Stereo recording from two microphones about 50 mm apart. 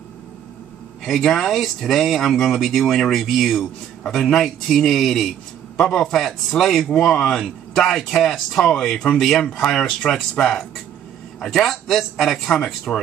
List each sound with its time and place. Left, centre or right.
1.0 s speech: centre
11.4 s speech: centre